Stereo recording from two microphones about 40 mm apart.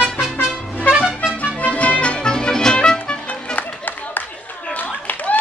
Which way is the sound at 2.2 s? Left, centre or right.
Left.